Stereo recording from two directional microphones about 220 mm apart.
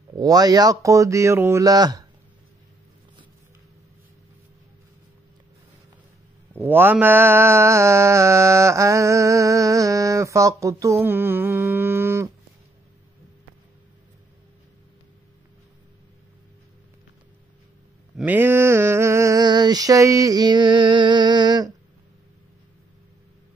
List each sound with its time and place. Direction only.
0.1 s mantra: 15° right (ahead or behind)
6.5 s mantra: 10° right (ahead or behind)
18.1 s mantra: 10° right (ahead or behind)